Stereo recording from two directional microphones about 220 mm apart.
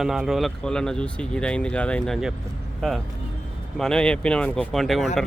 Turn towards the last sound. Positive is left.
turn(degrees=0)  # may be behind; listen again after turning